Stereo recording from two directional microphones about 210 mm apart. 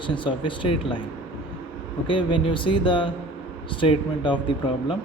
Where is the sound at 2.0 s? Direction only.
25° left (ahead or behind).